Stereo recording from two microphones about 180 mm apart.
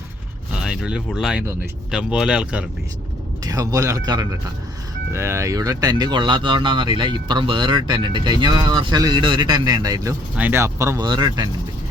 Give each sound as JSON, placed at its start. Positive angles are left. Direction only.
{"t": 0.6, "sound": "speech", "side_deg": -5}
{"t": 3.4, "sound": "speech", "side_deg": -20}